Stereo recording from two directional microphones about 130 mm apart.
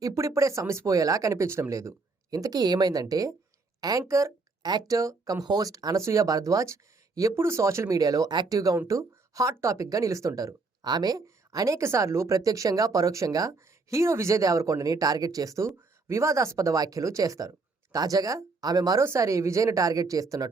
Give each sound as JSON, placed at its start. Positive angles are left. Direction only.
{"t": 0.0, "sound": "speech", "side_deg": -25}